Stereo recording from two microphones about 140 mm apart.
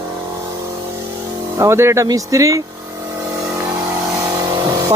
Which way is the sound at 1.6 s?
20° right (ahead or behind).